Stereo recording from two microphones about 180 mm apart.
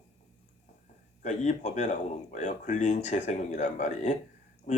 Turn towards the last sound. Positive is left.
turn(degrees=40)  # may be behind; listen again after turning